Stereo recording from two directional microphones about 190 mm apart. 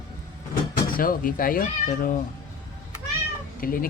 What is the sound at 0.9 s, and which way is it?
A man's voice, 50° left (ahead or behind).